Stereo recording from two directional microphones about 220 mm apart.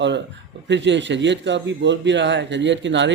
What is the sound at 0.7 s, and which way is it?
A man's voice, 55° right (ahead or behind).